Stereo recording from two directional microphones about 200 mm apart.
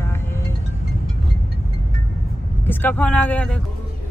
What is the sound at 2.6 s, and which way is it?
Speech, 10° left (ahead or behind).